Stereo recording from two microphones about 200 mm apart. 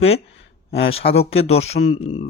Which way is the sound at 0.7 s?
75° left (ahead or behind).